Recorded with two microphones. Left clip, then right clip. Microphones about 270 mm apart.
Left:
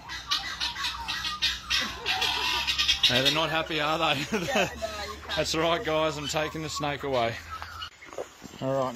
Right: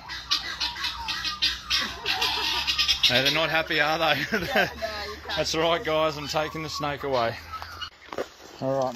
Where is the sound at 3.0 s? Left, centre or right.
Centre.